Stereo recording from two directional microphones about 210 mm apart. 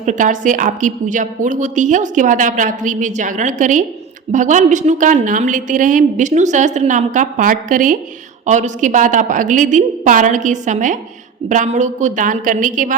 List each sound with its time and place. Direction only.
0.0 s a woman's voice: 35° right (ahead or behind)